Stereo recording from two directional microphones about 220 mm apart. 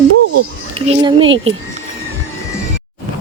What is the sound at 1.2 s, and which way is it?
Speech, 60° right (ahead or behind).